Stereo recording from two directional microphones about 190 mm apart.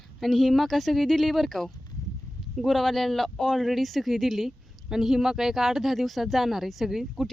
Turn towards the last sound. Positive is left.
turn(degrees=0)  # may be behind; listen again after turning